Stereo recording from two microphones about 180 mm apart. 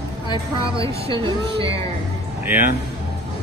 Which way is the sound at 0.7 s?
30° right (ahead or behind).